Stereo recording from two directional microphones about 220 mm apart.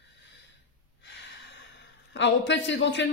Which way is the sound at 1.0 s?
55° left (ahead or behind).